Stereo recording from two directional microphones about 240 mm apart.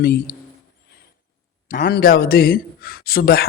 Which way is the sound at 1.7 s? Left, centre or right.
Left.